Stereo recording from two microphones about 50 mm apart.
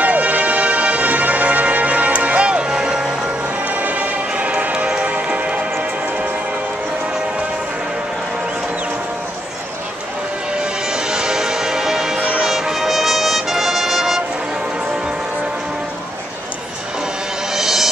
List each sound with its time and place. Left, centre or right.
0.0 s music: right
3.6 s music: right
10.6 s music: centre
12.2 s music: right
12.4 s music: centre
17.5 s music: centre